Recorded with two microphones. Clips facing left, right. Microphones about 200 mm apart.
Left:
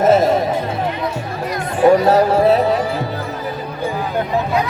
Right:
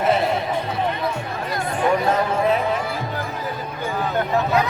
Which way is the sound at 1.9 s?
35° left (ahead or behind).